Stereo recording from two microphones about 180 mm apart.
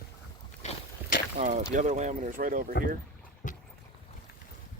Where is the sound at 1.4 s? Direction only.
40° right (ahead or behind).